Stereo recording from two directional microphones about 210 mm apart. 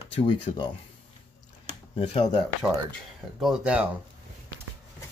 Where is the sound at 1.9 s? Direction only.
30° left (ahead or behind).